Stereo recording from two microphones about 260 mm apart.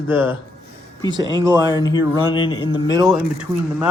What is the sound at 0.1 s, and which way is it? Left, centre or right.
Speech, centre.